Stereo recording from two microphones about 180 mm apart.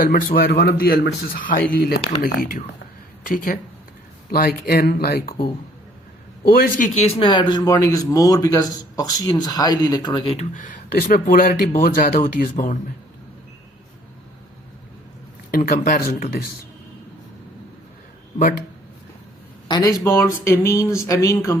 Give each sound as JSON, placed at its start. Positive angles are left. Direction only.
{"t": 0.0, "sound": "speech", "side_deg": 50}
{"t": 6.5, "sound": "a man's voice", "side_deg": 50}
{"t": 10.3, "sound": "speech", "side_deg": 45}
{"t": 15.5, "sound": "speech", "side_deg": 55}
{"t": 18.3, "sound": "speech", "side_deg": 50}
{"t": 19.6, "sound": "speech", "side_deg": 20}